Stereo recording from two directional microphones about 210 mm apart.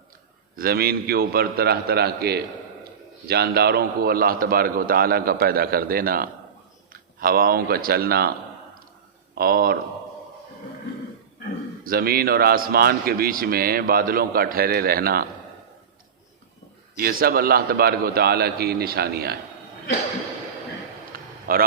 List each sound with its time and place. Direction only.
0.5 s a man's voice: 45° right (ahead or behind)
9.3 s speech: 45° right (ahead or behind)
11.8 s a man's voice: 45° right (ahead or behind)
17.0 s a man's voice: 45° right (ahead or behind)
21.1 s a sound: 45° right (ahead or behind)